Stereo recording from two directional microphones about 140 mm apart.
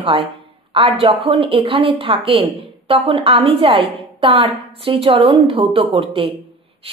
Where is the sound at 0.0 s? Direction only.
40° right (ahead or behind).